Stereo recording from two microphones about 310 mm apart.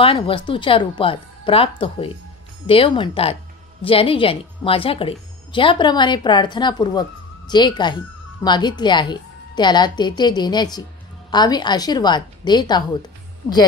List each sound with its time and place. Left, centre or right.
0.0 s a woman's voice: centre